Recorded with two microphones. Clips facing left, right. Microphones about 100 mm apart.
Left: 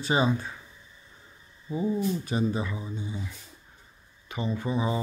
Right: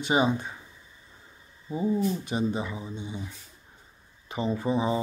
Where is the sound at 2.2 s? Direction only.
20° right (ahead or behind).